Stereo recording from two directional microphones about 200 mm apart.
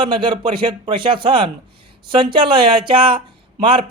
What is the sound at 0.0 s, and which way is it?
Speech, 25° right (ahead or behind).